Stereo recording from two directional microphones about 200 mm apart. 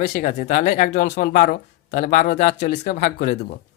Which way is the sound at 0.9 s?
60° left (ahead or behind).